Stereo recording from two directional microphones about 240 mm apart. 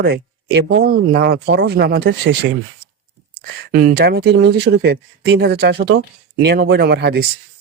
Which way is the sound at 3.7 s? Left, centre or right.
Right.